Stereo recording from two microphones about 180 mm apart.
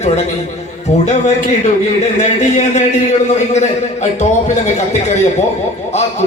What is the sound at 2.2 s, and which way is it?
A man's voice, 40° left (ahead or behind).